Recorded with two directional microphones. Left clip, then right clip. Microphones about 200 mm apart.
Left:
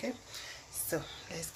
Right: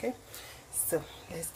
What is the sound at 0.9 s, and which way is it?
Speech, 5° right (ahead or behind).